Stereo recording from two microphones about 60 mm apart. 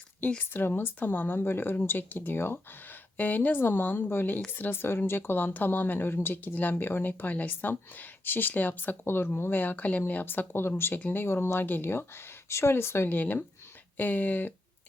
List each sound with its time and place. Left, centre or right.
0.2 s speech: left
13.1 s speech: left